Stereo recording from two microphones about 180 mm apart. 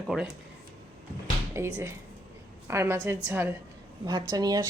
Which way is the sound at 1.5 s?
15° right (ahead or behind).